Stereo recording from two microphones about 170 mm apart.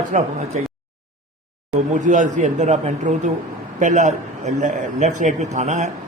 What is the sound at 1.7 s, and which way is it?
A man's voice, 45° right (ahead or behind).